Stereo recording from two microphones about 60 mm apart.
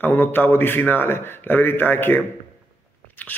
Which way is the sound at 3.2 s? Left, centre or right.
Left.